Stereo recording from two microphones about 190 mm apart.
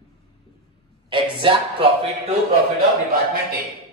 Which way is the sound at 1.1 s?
25° right (ahead or behind).